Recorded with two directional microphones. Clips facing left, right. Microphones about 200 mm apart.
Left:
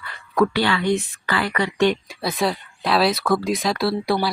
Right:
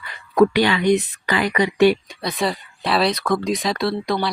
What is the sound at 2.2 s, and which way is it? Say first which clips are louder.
Speech: left 1 dB; centre (ahead or behind).